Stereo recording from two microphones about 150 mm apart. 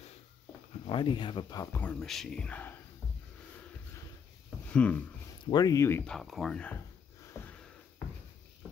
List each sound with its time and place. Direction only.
0.8 s speech: 35° left (ahead or behind)
1.8 s speech: 5° left (ahead or behind)
4.7 s speech: 10° left (ahead or behind)
5.4 s speech: 25° left (ahead or behind)
6.0 s speech: centre (ahead or behind)
7.3 s a sound: 15° left (ahead or behind)